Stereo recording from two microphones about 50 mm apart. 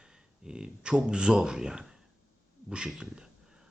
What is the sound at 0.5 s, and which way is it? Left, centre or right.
Speech, centre.